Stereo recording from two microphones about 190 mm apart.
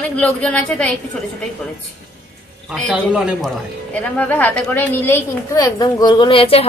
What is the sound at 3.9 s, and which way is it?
A woman's voice, 5° left (ahead or behind).